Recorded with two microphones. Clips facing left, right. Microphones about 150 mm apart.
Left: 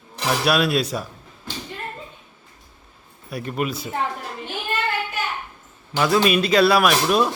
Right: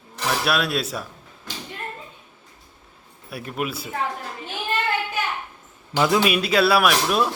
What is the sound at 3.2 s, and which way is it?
Speech, 5° right (ahead or behind).